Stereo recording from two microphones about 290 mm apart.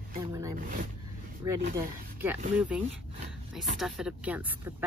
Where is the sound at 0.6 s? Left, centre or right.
Right.